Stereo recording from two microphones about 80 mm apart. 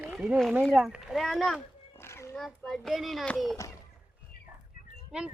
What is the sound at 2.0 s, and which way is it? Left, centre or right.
Cat, left.